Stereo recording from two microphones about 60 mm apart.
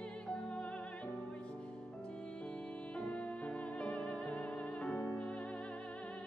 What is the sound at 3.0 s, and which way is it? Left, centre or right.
Music, centre.